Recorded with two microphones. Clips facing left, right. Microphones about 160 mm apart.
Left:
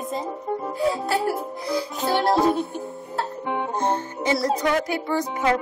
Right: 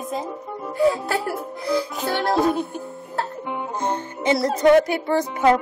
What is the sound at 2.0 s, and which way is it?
Music, 25° left (ahead or behind).